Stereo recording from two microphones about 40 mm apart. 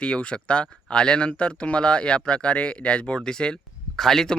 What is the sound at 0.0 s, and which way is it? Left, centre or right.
Speech, left.